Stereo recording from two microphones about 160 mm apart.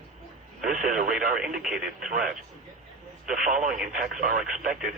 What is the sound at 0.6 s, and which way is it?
Speech, 55° right (ahead or behind).